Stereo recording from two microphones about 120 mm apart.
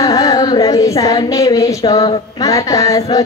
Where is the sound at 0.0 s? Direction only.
30° left (ahead or behind).